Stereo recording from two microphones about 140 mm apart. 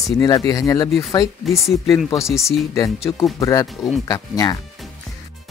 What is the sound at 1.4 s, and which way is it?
Speech, centre (ahead or behind).